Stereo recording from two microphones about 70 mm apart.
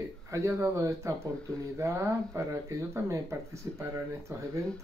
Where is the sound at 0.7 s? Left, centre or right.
Right.